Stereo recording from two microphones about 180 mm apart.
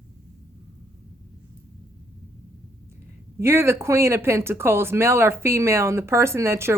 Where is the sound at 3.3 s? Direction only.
15° right (ahead or behind).